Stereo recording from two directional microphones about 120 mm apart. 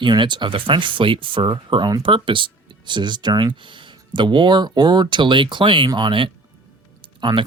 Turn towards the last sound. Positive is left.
turn(degrees=-40)  # may be behind; listen again after turning